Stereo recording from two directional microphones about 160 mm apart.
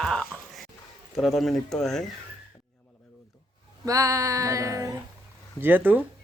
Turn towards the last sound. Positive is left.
turn(degrees=-10)  # may be behind; listen again after turning